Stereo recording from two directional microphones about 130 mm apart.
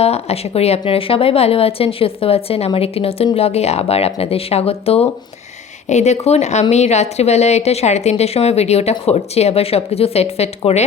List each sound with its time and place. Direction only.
0.0 s a woman's voice: 50° left (ahead or behind)
5.9 s speech: 60° left (ahead or behind)